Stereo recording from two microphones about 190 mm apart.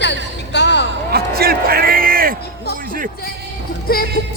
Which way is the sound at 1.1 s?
55° right (ahead or behind).